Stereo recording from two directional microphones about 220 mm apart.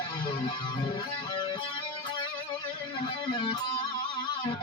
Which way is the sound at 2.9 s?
20° left (ahead or behind).